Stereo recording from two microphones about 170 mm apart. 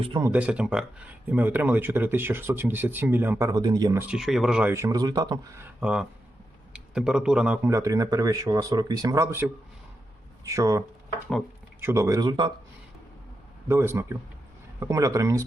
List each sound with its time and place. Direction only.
0.3 s speech: 5° right (ahead or behind)
4.1 s speech: centre (ahead or behind)
4.7 s speech: 20° right (ahead or behind)
5.8 s speech: 5° right (ahead or behind); by 12.5 s 25° right (ahead or behind)
13.7 s speech: 15° right (ahead or behind)